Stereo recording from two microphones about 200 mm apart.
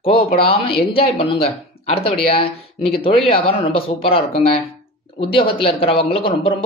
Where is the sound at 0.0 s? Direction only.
25° left (ahead or behind).